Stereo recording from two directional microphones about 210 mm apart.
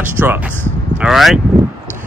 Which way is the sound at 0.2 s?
10° right (ahead or behind).